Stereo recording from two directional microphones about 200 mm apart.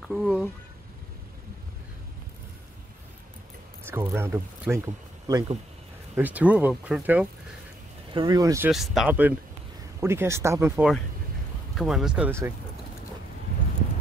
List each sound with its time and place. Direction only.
0.1 s speech: centre (ahead or behind)
3.8 s speech: 10° right (ahead or behind)
8.1 s speech: 20° right (ahead or behind)
8.7 s speech: centre (ahead or behind)
11.7 s speech: centre (ahead or behind)